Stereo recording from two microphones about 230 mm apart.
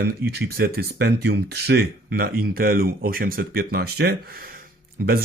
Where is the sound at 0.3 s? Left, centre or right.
Right.